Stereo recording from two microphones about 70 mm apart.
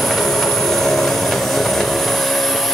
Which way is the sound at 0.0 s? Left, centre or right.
Centre.